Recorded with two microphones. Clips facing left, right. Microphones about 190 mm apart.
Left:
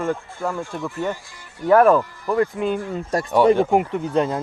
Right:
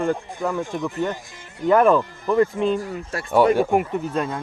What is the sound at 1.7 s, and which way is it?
Speech, centre (ahead or behind).